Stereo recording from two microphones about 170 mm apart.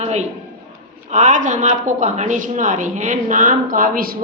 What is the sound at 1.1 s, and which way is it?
Speech, 45° right (ahead or behind).